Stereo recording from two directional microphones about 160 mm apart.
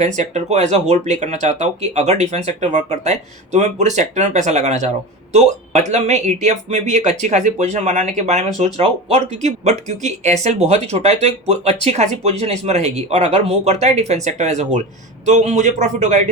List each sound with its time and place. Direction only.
0.2 s speech: 45° right (ahead or behind)